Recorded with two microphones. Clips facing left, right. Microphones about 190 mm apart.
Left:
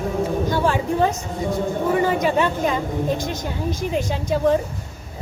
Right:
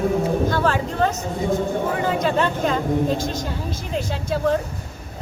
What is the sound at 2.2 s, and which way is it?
A woman's voice, 15° left (ahead or behind).